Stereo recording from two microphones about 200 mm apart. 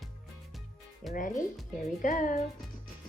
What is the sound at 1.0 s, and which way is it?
Speech, centre (ahead or behind).